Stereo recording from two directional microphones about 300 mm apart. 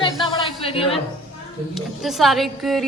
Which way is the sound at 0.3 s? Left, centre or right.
Centre.